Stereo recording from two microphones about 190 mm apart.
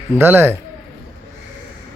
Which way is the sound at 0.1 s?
10° right (ahead or behind).